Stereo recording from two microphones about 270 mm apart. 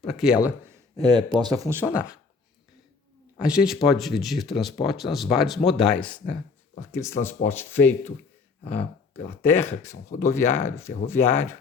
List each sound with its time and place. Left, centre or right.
0.0 s speech: centre
0.9 s speech: centre
3.4 s speech: centre
8.6 s speech: left
9.4 s speech: centre